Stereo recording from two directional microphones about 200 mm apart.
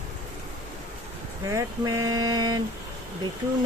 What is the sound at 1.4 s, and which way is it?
Speech, 15° right (ahead or behind).